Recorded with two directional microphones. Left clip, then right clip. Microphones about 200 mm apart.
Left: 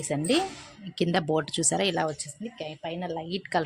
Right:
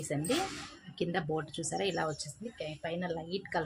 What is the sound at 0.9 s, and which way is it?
Speech, 55° left (ahead or behind).